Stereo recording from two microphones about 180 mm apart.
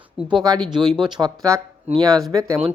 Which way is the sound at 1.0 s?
5° right (ahead or behind).